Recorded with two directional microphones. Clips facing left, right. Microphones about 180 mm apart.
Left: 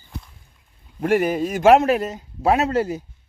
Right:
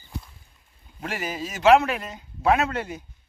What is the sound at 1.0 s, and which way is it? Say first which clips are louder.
A man's voice: left 12 dB; 55° left (ahead or behind).